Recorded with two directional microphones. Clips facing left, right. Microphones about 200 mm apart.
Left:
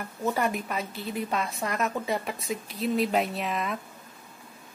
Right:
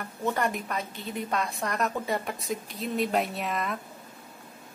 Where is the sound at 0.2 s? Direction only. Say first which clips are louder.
Left 1 dB; 5° left (ahead or behind).